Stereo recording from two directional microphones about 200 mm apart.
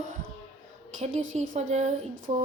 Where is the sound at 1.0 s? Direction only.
35° right (ahead or behind).